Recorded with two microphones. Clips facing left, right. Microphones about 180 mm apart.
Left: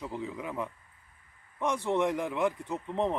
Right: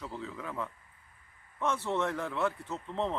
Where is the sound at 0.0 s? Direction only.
15° left (ahead or behind).